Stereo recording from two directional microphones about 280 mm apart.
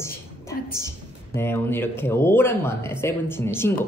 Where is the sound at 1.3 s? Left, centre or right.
Centre.